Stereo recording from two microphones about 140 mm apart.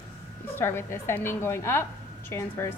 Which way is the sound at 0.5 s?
15° left (ahead or behind).